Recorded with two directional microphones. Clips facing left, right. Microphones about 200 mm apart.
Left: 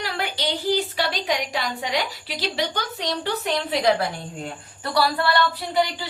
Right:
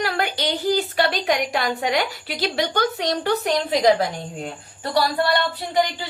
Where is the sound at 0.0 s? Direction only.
50° right (ahead or behind).